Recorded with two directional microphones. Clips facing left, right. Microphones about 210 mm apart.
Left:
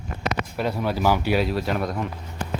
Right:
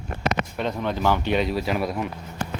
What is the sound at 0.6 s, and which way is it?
Speech, 5° left (ahead or behind).